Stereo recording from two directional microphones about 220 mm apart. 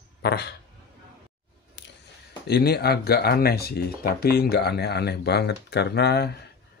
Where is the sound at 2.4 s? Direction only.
45° left (ahead or behind).